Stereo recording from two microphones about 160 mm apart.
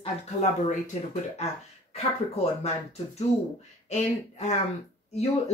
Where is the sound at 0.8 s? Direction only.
50° left (ahead or behind).